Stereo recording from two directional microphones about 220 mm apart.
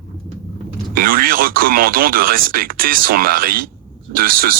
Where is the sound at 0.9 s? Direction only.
40° right (ahead or behind).